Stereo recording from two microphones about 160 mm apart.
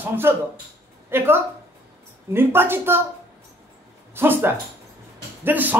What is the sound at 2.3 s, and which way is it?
Speech, 15° right (ahead or behind).